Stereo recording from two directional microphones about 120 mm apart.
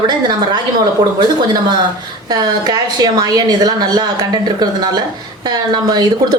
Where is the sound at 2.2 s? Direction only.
35° right (ahead or behind).